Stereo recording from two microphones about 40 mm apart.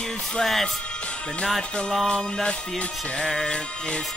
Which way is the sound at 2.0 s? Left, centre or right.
Left.